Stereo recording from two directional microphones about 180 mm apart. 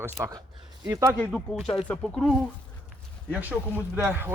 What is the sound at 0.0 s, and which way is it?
Speech, 20° right (ahead or behind).